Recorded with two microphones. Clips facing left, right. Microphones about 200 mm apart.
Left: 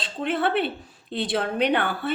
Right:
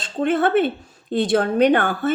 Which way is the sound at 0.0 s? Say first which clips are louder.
Right 6 dB; 45° right (ahead or behind).